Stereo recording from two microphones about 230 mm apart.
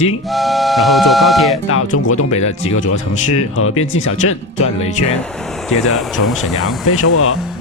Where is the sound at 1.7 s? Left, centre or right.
Left.